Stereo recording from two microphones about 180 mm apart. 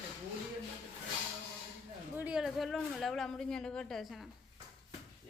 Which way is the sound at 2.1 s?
5° right (ahead or behind).